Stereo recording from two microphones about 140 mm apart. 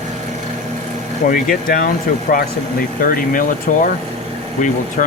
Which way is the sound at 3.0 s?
80° left.